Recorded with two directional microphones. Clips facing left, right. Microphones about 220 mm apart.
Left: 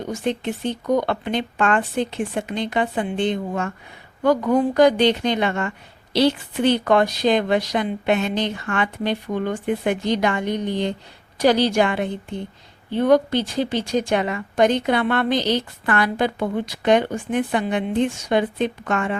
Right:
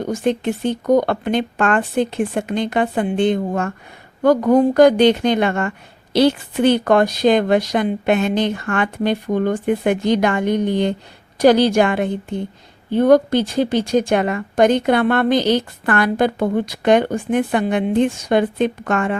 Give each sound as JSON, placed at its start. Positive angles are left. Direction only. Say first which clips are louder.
{"t": 0.0, "sound": "a woman's voice", "louder": "right 5 dB", "side_deg": -50}